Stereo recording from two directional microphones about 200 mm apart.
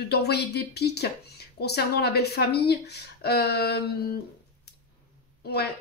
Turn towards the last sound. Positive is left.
turn(degrees=55)  # may be behind; listen again after turning